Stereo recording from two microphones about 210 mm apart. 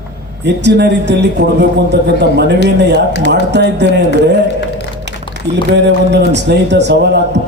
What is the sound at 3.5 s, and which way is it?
Speech, 55° right (ahead or behind).